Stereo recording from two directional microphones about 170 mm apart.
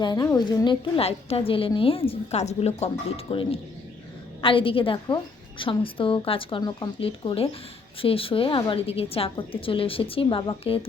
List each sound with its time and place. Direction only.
0.0 s a woman's voice: 25° left (ahead or behind)